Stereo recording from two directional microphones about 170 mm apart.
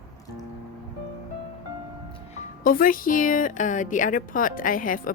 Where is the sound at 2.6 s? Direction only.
55° left (ahead or behind).